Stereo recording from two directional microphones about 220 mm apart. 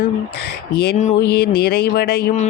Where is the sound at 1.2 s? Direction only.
45° left (ahead or behind).